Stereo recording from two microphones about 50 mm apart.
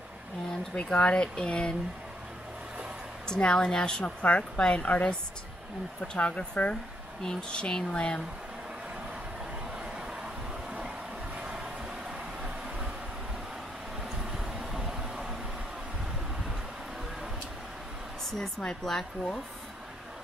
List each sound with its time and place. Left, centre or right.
0.7 s a woman's voice: left
3.3 s a woman's voice: centre
6.1 s a woman's voice: left
9.9 s a sound: centre
11.3 s vehicle: right
14.3 s vehicle: centre
18.4 s a woman's voice: centre